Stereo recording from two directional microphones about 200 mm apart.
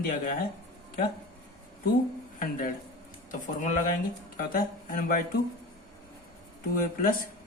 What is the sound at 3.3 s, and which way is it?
Speech, 40° left (ahead or behind).